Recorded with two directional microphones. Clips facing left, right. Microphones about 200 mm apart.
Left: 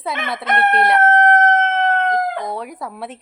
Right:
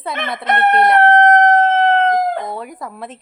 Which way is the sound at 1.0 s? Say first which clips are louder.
Right 3 dB; 35° right (ahead or behind).